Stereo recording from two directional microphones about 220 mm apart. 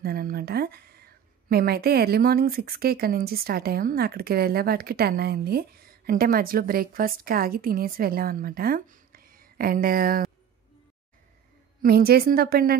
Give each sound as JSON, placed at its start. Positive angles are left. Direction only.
{"t": 0.0, "sound": "a woman's voice", "side_deg": -45}
{"t": 11.8, "sound": "a woman's voice", "side_deg": -45}